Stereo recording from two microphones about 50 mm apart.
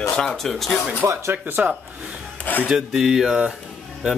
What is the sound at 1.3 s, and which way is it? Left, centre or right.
Speech, right.